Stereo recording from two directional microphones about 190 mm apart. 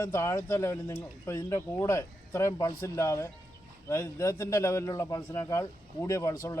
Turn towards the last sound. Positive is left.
turn(degrees=15)  # may be behind; listen again after turning